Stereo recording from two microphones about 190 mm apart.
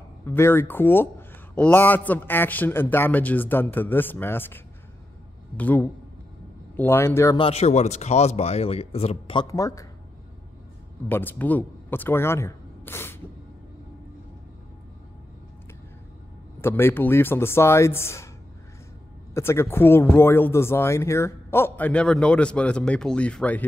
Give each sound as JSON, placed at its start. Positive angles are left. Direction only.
{"t": 0.2, "sound": "speech", "side_deg": 10}
{"t": 5.6, "sound": "speech", "side_deg": 10}
{"t": 7.3, "sound": "speech", "side_deg": 30}
{"t": 11.1, "sound": "speech", "side_deg": 10}
{"t": 16.6, "sound": "speech", "side_deg": 10}
{"t": 19.3, "sound": "speech", "side_deg": 15}